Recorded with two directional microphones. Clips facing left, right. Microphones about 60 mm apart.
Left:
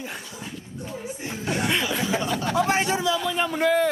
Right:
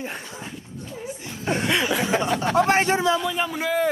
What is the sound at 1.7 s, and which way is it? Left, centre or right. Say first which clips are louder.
Chuckle: right 5 dB; right.